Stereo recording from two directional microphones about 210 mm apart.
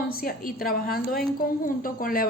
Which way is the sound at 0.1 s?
45° left (ahead or behind).